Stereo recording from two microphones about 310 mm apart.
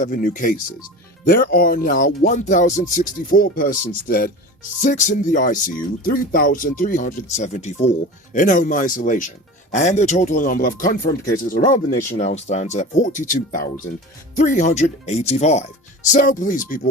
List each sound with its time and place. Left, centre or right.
0.0 s speech: left